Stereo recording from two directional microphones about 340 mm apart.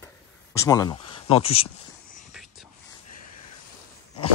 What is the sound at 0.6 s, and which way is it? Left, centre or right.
Speech, centre.